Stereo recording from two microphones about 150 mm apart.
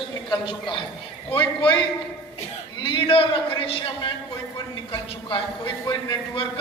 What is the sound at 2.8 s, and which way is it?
A woman's voice, 35° left (ahead or behind).